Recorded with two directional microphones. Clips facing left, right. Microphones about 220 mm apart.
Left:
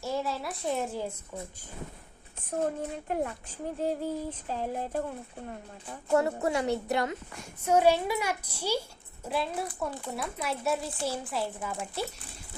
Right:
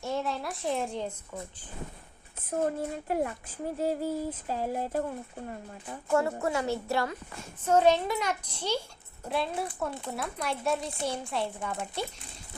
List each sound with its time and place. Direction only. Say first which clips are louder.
0.0 s a woman's voice: even; centre (ahead or behind)
2.4 s a woman's voice: right 1 dB; 5° right (ahead or behind)
3.8 s a sound: right 1 dB; 5° right (ahead or behind)
6.1 s a woman's voice: left 1 dB; 20° left (ahead or behind); by 12.0 s 5° left (ahead or behind)